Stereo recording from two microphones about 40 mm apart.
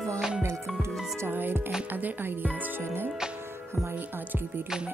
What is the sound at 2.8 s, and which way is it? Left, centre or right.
Speech, right.